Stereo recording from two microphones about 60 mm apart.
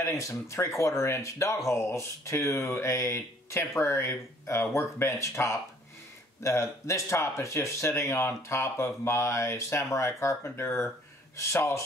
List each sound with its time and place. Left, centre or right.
0.0 s speech: left